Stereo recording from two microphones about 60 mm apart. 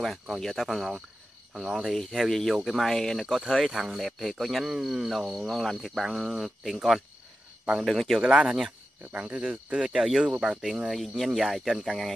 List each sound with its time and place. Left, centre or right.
0.0 s speech: centre
8.2 s speech: centre
9.9 s speech: centre